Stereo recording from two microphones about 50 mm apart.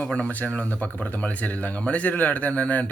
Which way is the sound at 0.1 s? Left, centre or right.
Left.